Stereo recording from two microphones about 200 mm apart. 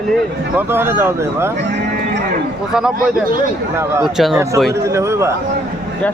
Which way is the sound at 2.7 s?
5° right (ahead or behind).